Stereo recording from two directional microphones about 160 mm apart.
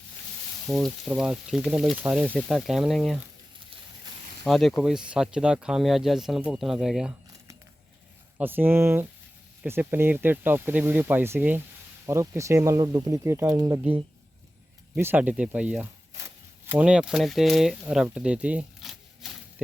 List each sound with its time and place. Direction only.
0.7 s speech: centre (ahead or behind)
4.4 s speech: centre (ahead or behind)
8.4 s speech: 10° right (ahead or behind)
14.9 s speech: 10° right (ahead or behind)